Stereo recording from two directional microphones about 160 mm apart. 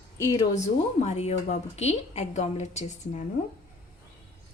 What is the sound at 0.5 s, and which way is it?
A woman's voice, 45° left (ahead or behind).